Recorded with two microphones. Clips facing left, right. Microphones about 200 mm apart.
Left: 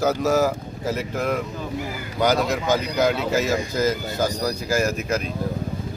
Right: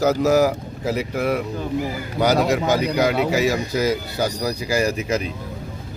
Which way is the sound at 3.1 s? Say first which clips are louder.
Right 3 dB; 65° right (ahead or behind).